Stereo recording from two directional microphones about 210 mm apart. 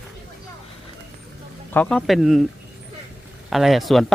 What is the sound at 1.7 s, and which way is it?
Speech, 5° left (ahead or behind).